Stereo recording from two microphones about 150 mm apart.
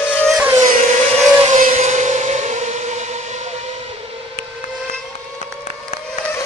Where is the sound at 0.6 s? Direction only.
55° right (ahead or behind).